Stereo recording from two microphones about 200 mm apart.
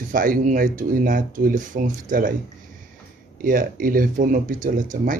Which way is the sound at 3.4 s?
45° right (ahead or behind).